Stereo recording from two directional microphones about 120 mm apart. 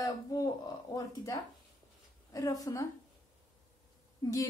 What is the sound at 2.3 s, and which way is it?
Speech, 30° left (ahead or behind).